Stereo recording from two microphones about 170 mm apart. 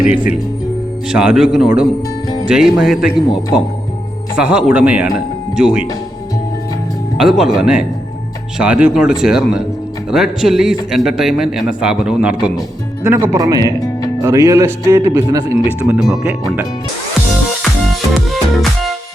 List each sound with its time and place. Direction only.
1.1 s speech: 5° right (ahead or behind)
4.4 s speech: 5° right (ahead or behind)
7.2 s speech: 5° right (ahead or behind)
15.8 s speech: 5° right (ahead or behind)
17.6 s music: centre (ahead or behind)